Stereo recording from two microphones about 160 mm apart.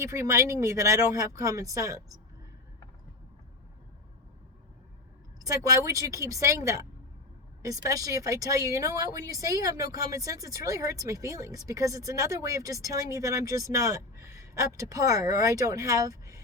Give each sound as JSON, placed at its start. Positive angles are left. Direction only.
{"t": 0.0, "sound": "speech", "side_deg": -20}
{"t": 5.4, "sound": "speech", "side_deg": -20}